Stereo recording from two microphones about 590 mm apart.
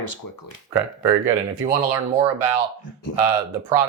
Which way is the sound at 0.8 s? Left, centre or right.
Right.